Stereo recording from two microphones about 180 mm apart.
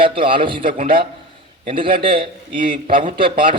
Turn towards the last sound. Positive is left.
turn(degrees=-25)  # may be behind; listen again after turning